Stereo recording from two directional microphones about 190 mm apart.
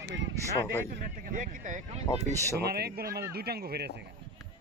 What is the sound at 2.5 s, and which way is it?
Speech, 55° right (ahead or behind).